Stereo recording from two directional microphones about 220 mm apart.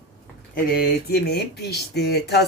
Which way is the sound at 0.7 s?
45° left (ahead or behind).